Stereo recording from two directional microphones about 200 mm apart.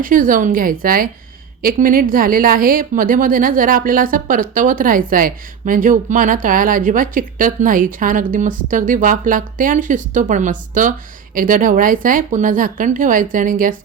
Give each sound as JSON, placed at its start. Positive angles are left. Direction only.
{"t": 0.0, "sound": "a woman's voice", "side_deg": -45}